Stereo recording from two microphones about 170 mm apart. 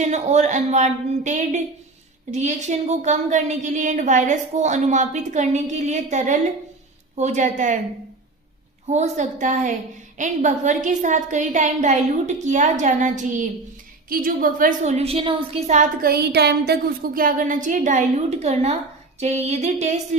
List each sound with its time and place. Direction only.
0.0 s a woman's voice: 40° right (ahead or behind)
8.9 s a woman's voice: 45° right (ahead or behind)
16.0 s a woman's voice: 70° right (ahead or behind); by 18.8 s 40° right (ahead or behind)
19.2 s a sound: 40° right (ahead or behind)